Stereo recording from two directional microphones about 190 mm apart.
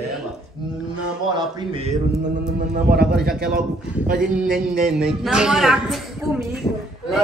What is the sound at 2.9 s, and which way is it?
Speech, 55° right (ahead or behind).